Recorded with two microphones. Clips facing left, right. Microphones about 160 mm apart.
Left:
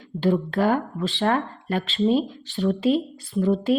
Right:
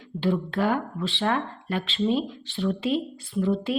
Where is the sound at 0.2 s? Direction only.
40° left (ahead or behind).